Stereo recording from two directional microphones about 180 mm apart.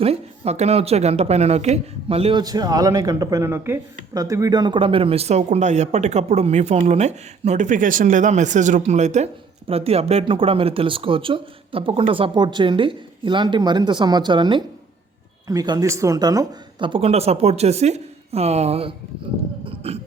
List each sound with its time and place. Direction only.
0.0 s a man's voice: 35° right (ahead or behind)
2.4 s a man's voice: 20° right (ahead or behind)
19.6 s a sound: 30° right (ahead or behind)